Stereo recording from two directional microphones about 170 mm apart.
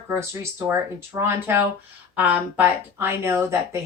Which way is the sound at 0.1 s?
15° right (ahead or behind).